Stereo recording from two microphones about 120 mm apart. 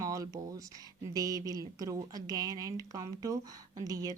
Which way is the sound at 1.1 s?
30° right (ahead or behind).